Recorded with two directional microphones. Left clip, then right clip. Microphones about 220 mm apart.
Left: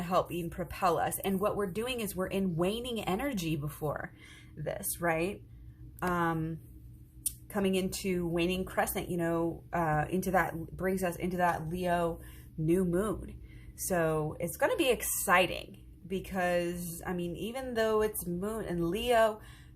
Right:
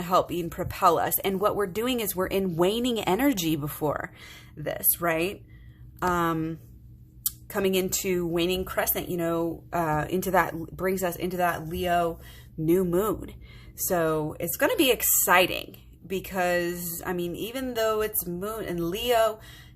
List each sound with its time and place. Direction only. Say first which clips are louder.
0.0 s speech: right 7 dB; 30° right (ahead or behind)